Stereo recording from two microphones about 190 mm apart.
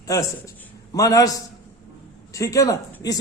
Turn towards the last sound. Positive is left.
turn(degrees=20)  # may be behind; listen again after turning